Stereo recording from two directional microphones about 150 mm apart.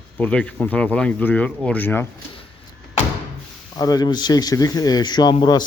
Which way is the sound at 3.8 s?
25° left (ahead or behind).